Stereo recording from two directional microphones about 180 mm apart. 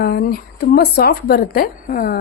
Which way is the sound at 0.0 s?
55° left (ahead or behind).